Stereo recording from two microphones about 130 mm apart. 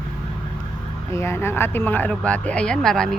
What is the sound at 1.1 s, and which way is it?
Speech, 20° left (ahead or behind).